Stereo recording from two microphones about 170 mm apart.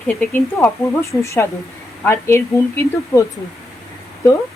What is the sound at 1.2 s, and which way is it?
A woman's voice, 15° left (ahead or behind).